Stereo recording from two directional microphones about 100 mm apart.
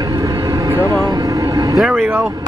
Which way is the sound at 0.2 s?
35° right (ahead or behind).